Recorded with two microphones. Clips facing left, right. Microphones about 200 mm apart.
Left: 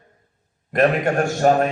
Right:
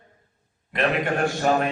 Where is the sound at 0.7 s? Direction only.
45° left (ahead or behind).